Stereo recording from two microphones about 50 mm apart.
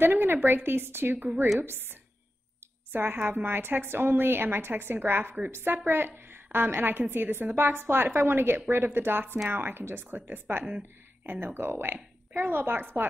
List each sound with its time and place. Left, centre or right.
0.0 s a woman's voice: right